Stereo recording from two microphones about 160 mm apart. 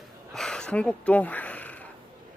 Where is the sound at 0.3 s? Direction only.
5° left (ahead or behind).